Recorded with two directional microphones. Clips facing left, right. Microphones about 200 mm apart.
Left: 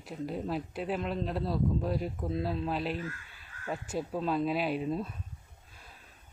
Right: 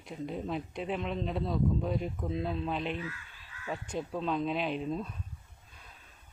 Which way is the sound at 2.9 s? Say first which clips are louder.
Left 1 dB; 45° left (ahead or behind).